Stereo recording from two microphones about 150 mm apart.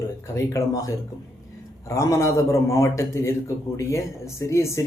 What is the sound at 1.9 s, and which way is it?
A man's voice, 20° left (ahead or behind).